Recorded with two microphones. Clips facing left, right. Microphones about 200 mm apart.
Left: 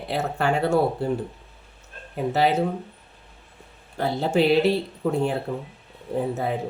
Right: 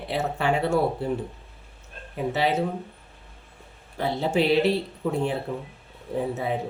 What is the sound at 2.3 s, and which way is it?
Speech, centre (ahead or behind).